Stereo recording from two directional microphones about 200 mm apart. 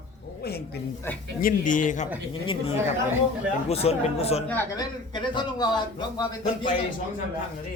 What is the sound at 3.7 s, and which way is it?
Speech, 30° left (ahead or behind).